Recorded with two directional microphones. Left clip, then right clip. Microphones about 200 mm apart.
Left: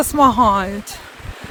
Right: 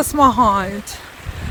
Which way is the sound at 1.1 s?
60° right (ahead or behind).